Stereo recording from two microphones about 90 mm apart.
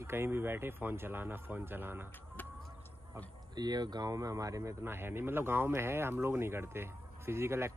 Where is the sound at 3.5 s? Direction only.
50° right (ahead or behind).